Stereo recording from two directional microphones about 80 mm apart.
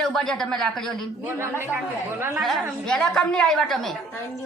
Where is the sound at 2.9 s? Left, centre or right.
Centre.